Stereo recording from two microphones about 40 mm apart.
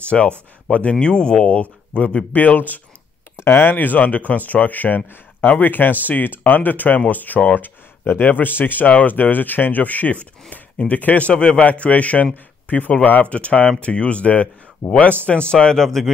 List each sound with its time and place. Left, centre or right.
0.1 s speech: centre
0.7 s speech: left
0.9 s speech: left
2.3 s speech: left
3.3 s speech: left
3.7 s speech: left
13.2 s speech: left
15.2 s speech: left; by 16.1 s centre